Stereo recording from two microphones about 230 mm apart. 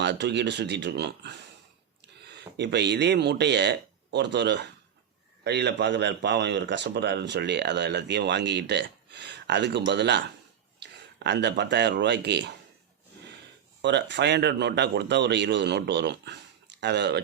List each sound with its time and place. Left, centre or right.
0.0 s speech: right
2.6 s speech: right
13.8 s speech: right